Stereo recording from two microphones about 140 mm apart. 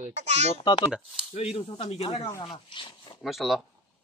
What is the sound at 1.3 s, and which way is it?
Speech, 45° left (ahead or behind).